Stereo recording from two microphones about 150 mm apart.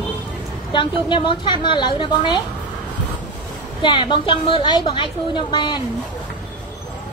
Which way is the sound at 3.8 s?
30° left (ahead or behind).